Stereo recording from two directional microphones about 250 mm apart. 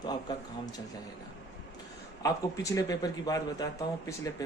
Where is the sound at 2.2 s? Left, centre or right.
Centre.